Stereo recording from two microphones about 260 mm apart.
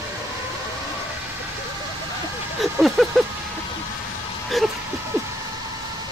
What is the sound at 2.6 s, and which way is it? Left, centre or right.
Vehicle, centre.